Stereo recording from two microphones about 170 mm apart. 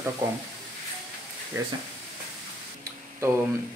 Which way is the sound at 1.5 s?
15° right (ahead or behind).